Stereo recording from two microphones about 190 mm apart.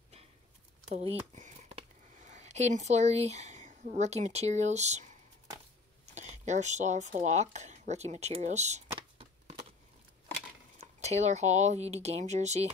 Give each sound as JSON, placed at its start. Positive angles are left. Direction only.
{"t": 0.9, "sound": "speech", "side_deg": -35}
{"t": 6.1, "sound": "speech", "side_deg": -35}
{"t": 10.8, "sound": "speech", "side_deg": -35}